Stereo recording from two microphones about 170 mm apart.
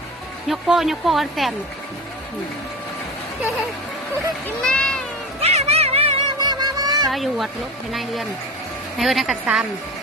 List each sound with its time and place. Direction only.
0.4 s speech: centre (ahead or behind)
4.4 s speech: 5° left (ahead or behind)
5.4 s a sound: 40° right (ahead or behind); by 7.1 s 20° right (ahead or behind)
7.1 s speech: centre (ahead or behind)